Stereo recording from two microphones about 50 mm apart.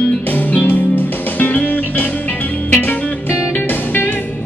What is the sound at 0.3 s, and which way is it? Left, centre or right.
Music, left.